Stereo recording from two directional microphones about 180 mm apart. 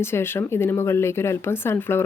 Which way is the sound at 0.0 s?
15° left (ahead or behind).